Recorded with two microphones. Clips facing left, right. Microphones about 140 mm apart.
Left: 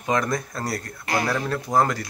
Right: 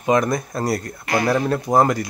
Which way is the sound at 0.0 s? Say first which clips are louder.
Right 5 dB; 15° right (ahead or behind).